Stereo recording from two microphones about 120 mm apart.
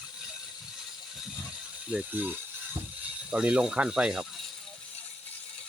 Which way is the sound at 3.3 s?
10° right (ahead or behind).